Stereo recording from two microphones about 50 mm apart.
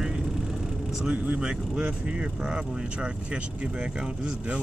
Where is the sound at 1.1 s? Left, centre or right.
Right.